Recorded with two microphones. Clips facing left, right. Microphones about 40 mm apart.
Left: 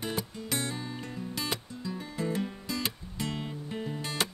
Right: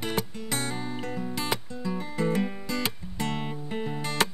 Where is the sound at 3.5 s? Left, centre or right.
Right.